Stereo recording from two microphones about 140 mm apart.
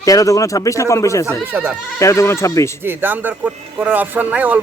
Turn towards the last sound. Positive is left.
turn(degrees=-10)  # may be behind; listen again after turning